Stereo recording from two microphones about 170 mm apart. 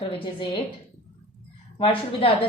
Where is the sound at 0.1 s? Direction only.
35° left (ahead or behind).